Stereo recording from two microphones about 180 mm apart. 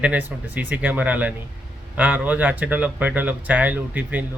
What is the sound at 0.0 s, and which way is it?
A man's voice, 10° right (ahead or behind).